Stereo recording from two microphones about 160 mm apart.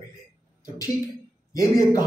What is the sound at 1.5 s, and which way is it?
Speech, 20° left (ahead or behind).